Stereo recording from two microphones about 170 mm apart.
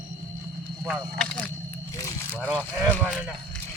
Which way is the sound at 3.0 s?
5° right (ahead or behind).